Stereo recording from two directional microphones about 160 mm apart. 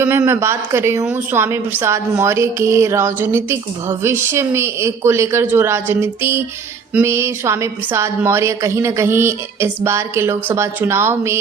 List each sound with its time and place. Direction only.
0.0 s a woman's voice: 15° right (ahead or behind)